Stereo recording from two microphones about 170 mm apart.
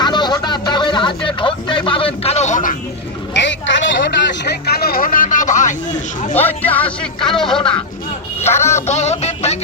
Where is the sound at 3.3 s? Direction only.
90° left.